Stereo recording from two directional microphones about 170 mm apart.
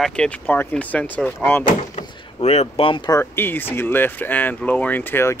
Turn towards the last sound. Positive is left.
turn(degrees=15)  # may be behind; listen again after turning